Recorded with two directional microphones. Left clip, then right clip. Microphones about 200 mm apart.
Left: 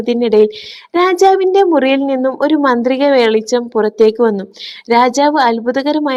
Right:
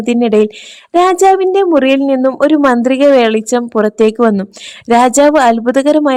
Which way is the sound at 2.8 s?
65° right (ahead or behind).